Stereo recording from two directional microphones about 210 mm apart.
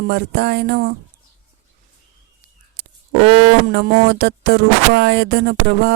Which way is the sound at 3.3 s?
50° right (ahead or behind).